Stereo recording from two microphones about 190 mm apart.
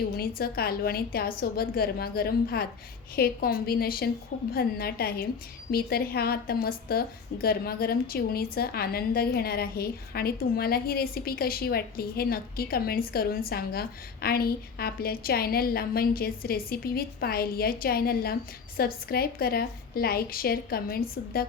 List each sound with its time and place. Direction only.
0.2 s a woman's voice: 50° left (ahead or behind)